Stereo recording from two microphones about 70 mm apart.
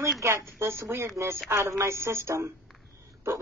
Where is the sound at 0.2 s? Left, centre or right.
Right.